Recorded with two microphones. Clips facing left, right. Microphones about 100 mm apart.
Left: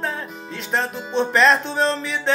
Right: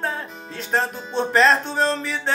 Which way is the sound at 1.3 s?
40° right (ahead or behind).